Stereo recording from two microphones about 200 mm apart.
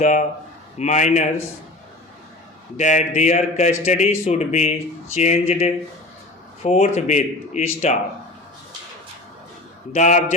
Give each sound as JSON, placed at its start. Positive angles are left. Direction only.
{"t": 0.0, "sound": "speech", "side_deg": 40}
{"t": 2.7, "sound": "speech", "side_deg": 35}
{"t": 9.9, "sound": "speech", "side_deg": 35}